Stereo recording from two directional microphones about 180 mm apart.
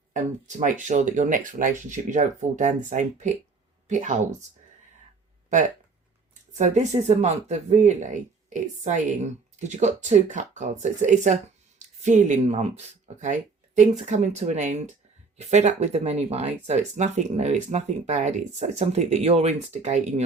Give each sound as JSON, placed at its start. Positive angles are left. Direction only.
{"t": 0.1, "sound": "speech", "side_deg": -45}
{"t": 5.5, "sound": "speech", "side_deg": -45}